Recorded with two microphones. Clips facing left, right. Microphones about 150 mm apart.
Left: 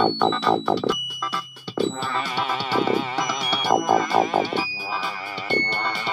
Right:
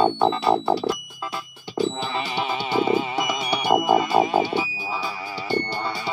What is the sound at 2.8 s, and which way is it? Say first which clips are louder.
Music: right 1 dB; 10° right (ahead or behind).